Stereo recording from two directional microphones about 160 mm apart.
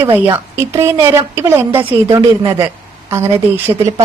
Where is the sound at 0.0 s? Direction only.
15° right (ahead or behind).